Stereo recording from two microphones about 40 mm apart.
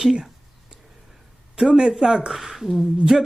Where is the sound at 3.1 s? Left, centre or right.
Centre.